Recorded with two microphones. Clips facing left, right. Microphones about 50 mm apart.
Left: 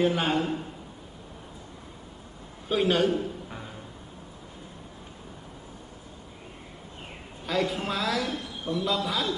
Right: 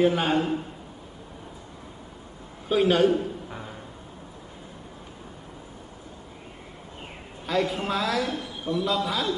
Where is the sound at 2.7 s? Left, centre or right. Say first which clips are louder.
Right 3 dB; centre.